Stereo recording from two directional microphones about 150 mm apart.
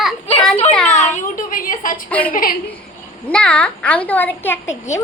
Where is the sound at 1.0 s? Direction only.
60° left (ahead or behind).